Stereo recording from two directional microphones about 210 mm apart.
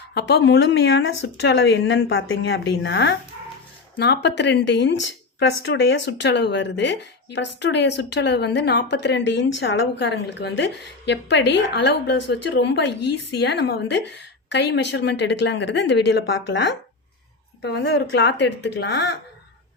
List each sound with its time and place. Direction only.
0.1 s speech: 55° left (ahead or behind)